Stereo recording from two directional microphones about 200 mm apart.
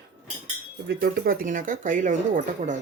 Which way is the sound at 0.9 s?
45° right (ahead or behind).